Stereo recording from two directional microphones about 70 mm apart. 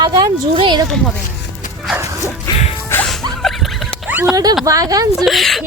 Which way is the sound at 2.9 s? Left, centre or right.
Left.